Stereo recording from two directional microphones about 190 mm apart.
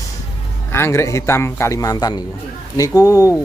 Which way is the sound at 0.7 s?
15° left (ahead or behind).